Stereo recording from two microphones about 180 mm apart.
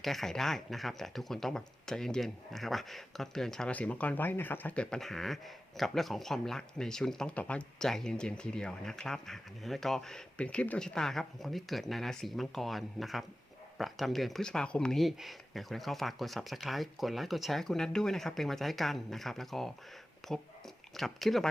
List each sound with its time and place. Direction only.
0.0 s speech: centre (ahead or behind)